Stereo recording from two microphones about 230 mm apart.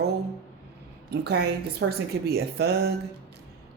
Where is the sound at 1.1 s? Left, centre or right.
Right.